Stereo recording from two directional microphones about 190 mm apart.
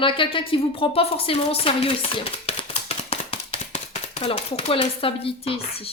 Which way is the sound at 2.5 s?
30° left (ahead or behind).